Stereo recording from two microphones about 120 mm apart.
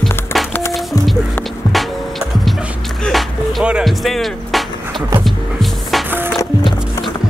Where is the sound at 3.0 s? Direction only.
Centre (ahead or behind).